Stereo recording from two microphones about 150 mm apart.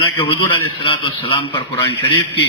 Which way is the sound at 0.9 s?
35° left (ahead or behind).